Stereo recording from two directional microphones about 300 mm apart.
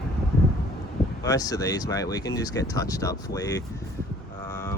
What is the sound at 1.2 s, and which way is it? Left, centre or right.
Speech, centre.